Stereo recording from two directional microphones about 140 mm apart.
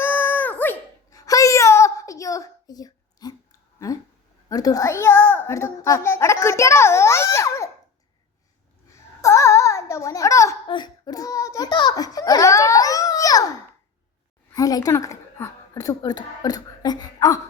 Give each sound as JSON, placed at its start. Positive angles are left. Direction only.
{"t": 0.0, "sound": "dog", "side_deg": 15}
{"t": 1.1, "sound": "a sound", "side_deg": 25}
{"t": 4.4, "sound": "a child's voice", "side_deg": 25}
{"t": 9.2, "sound": "a sound", "side_deg": 20}
{"t": 10.7, "sound": "a child's voice", "side_deg": 30}
{"t": 14.5, "sound": "a woman's voice", "side_deg": 25}